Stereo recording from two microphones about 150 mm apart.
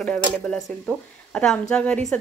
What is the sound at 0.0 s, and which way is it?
Speech, 5° left (ahead or behind).